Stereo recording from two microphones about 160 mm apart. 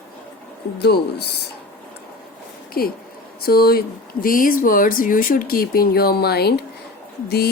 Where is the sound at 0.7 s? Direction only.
90° left.